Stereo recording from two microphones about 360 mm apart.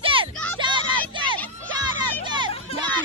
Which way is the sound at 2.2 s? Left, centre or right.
Centre.